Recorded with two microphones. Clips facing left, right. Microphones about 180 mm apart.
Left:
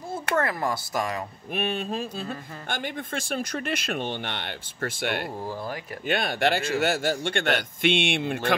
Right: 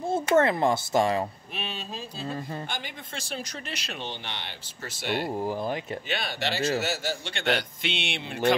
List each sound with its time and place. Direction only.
0.1 s speech: 25° right (ahead or behind)
1.5 s speech: 50° left (ahead or behind)
5.4 s speech: 20° right (ahead or behind)
6.0 s speech: 50° left (ahead or behind)